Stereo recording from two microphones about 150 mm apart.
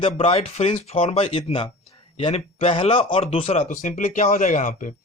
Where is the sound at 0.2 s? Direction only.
40° left (ahead or behind).